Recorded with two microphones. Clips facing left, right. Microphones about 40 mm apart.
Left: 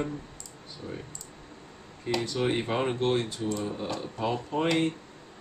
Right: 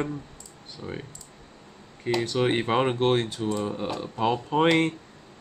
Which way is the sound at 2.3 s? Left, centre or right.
Right.